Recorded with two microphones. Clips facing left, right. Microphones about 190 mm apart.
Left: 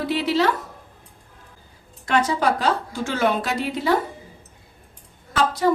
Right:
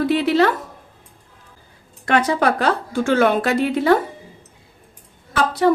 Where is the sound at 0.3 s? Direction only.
55° right (ahead or behind).